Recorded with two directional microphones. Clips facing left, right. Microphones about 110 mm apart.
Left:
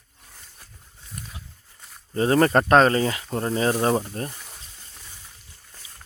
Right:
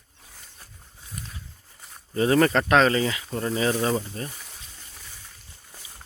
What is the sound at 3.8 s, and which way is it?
Speech, 50° left (ahead or behind).